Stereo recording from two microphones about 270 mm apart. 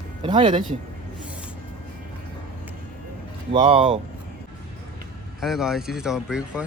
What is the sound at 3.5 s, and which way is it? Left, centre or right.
Speech, centre.